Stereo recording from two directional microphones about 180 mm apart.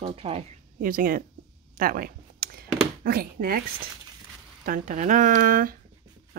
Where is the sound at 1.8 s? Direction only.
55° right (ahead or behind).